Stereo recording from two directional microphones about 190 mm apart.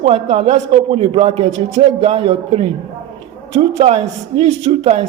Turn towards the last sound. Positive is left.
turn(degrees=-35)  # may be behind; listen again after turning